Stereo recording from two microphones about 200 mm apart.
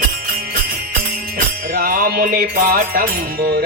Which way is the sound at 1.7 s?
45° right (ahead or behind).